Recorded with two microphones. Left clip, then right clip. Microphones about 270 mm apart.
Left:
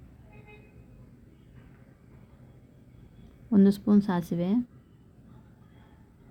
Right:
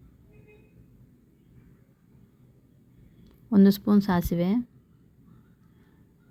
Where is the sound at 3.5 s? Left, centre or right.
Right.